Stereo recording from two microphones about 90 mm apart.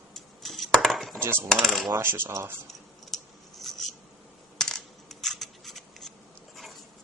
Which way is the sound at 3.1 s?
Centre (ahead or behind).